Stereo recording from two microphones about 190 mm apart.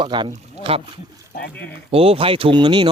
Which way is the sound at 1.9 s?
30° right (ahead or behind).